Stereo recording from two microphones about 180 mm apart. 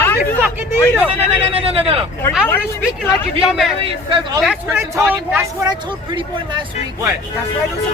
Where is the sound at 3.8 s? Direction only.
30° right (ahead or behind).